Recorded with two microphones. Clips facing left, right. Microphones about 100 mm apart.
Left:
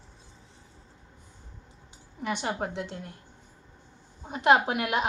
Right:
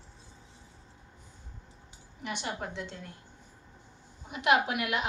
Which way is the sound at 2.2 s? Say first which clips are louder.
Left 6 dB; 50° left (ahead or behind).